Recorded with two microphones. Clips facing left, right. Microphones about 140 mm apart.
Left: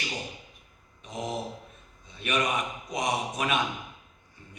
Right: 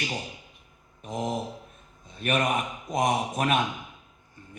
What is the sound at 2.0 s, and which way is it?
A man's voice, 50° right (ahead or behind).